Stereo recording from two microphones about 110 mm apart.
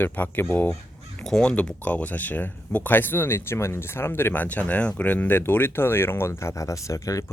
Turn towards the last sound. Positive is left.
turn(degrees=30)  # may be behind; listen again after turning